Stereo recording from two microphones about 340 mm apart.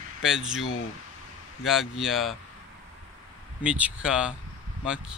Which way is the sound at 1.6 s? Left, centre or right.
Centre.